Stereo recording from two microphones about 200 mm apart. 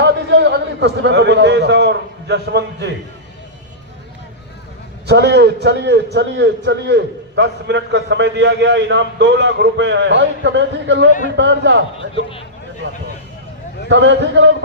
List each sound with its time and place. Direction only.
0.0 s a man's voice: 60° right (ahead or behind)
5.0 s a man's voice: 55° right (ahead or behind)
12.1 s speech: 30° left (ahead or behind)
13.9 s a man's voice: 60° right (ahead or behind)